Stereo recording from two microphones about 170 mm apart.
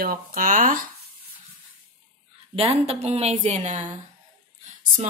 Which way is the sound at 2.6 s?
35° right (ahead or behind).